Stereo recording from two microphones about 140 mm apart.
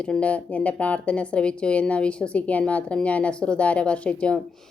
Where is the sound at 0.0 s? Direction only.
10° left (ahead or behind).